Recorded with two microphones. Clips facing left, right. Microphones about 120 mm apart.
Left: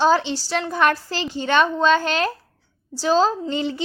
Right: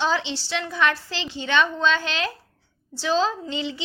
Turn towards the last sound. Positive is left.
turn(degrees=45)  # may be behind; listen again after turning